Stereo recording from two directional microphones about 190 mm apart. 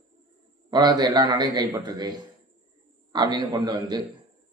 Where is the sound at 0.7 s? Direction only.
20° right (ahead or behind).